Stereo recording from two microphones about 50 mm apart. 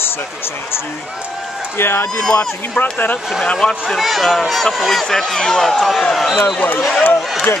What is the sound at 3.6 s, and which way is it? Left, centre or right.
Speech, centre.